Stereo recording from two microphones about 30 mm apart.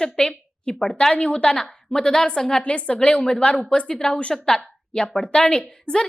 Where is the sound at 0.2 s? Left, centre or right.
Left.